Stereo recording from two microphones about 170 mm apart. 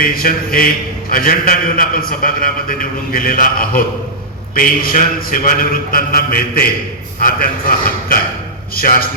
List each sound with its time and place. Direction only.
0.0 s a man's voice: 60° left (ahead or behind)